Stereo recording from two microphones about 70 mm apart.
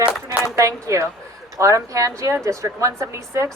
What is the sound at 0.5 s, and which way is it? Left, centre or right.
A woman's voice, right.